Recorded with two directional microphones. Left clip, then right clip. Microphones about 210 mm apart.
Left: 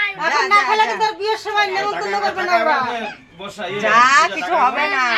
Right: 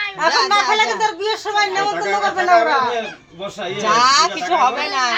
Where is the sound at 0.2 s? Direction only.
25° right (ahead or behind).